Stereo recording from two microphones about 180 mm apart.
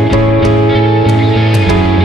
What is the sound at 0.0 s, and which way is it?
Music, centre (ahead or behind).